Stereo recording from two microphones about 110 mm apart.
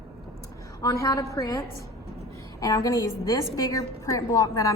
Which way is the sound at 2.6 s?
30° left (ahead or behind).